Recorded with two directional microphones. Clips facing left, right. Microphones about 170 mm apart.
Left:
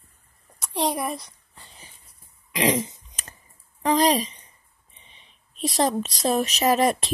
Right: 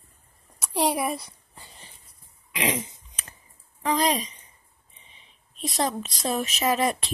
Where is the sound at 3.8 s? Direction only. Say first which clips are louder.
Left 4 dB; 35° left (ahead or behind).